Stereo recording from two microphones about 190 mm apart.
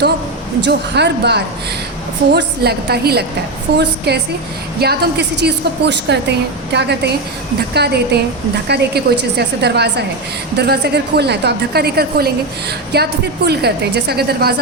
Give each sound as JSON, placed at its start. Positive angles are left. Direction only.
{"t": 0.6, "sound": "a woman's voice", "side_deg": -65}